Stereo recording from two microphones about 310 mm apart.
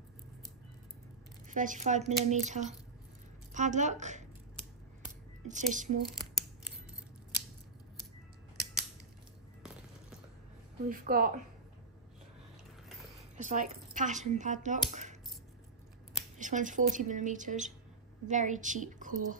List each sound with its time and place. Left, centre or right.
1.5 s a woman's voice: right
5.5 s a woman's voice: right
6.0 s scissors: centre
10.9 s a woman's voice: right
13.4 s speech: right
16.3 s a woman's voice: right